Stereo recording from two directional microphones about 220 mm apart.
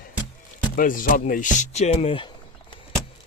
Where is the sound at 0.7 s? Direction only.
40° left (ahead or behind).